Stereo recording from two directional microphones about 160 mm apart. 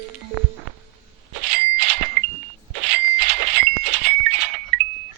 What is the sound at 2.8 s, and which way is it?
Bicycle bell, 45° right (ahead or behind).